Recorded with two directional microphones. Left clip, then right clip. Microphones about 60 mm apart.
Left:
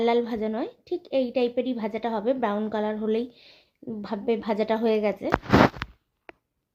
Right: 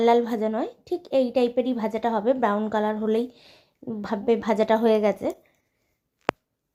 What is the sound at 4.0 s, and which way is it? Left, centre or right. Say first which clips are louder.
A woman's voice: right 4 dB; right.